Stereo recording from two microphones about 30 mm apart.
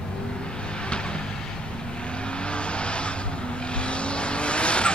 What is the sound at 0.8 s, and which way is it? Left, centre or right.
Vehicle, left.